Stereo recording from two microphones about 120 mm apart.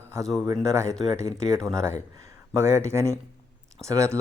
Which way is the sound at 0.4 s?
25° right (ahead or behind).